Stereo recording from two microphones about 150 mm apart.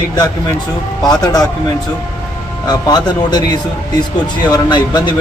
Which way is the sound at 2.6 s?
30° left (ahead or behind).